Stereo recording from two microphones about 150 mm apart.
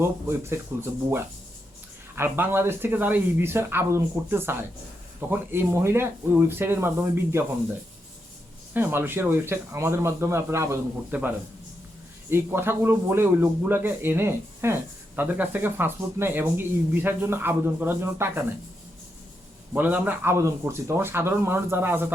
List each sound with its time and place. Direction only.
0.0 s speech: 15° right (ahead or behind)
8.7 s speech: 15° right (ahead or behind)
12.3 s speech: 15° right (ahead or behind)
19.7 s speech: 10° right (ahead or behind)